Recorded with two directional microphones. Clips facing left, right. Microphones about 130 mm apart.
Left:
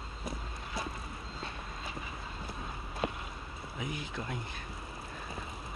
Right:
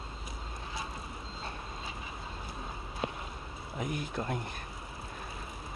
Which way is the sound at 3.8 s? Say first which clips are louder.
Right 4 dB; 45° right (ahead or behind).